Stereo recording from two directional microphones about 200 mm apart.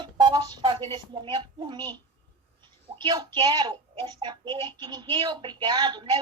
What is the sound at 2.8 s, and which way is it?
A child's voice, 20° right (ahead or behind).